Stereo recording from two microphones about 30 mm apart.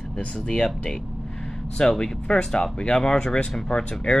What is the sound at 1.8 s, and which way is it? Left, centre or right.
Speech, left.